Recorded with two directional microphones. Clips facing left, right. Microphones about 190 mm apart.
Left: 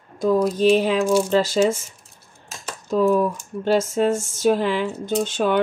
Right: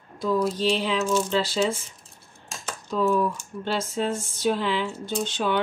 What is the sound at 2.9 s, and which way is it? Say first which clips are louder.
Speech: left 5 dB; 45° left (ahead or behind).